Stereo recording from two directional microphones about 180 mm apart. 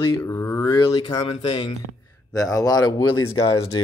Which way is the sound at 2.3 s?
20° left (ahead or behind).